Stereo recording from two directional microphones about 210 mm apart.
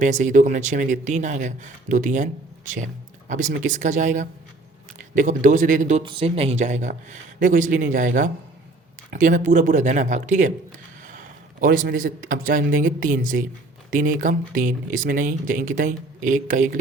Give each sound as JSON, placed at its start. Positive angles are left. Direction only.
{"t": 0.0, "sound": "speech", "side_deg": -35}
{"t": 6.1, "sound": "speech", "side_deg": -25}
{"t": 11.6, "sound": "speech", "side_deg": -40}